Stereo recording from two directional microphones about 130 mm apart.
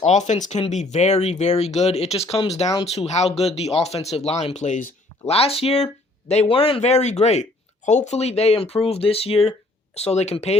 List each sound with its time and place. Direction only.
0.0 s speech: 65° left (ahead or behind)
5.3 s speech: 50° left (ahead or behind)